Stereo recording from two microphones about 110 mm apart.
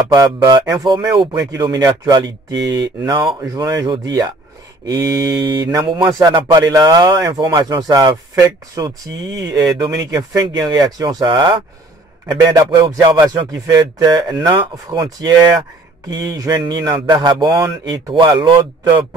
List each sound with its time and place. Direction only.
0.1 s speech: 25° right (ahead or behind); by 19.0 s 50° right (ahead or behind)